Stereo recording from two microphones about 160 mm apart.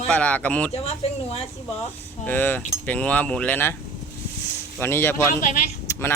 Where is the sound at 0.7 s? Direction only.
40° left (ahead or behind).